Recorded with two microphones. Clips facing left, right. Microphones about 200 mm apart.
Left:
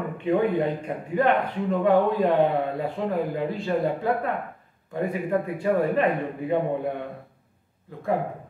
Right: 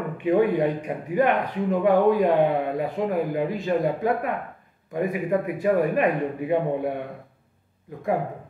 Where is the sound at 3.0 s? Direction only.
15° right (ahead or behind).